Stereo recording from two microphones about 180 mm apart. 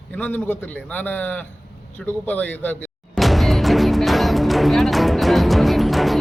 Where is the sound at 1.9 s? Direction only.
10° left (ahead or behind).